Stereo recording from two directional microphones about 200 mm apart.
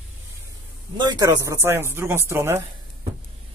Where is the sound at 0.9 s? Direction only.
20° right (ahead or behind).